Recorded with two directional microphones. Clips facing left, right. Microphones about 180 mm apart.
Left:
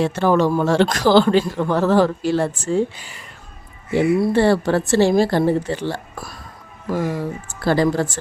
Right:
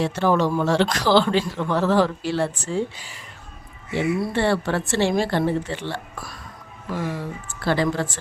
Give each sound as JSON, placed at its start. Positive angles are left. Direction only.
{"t": 0.0, "sound": "speech", "side_deg": 50}
{"t": 3.9, "sound": "speech", "side_deg": 40}